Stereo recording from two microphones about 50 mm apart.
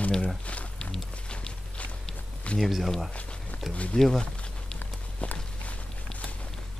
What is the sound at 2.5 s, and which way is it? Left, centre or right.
Speech, centre.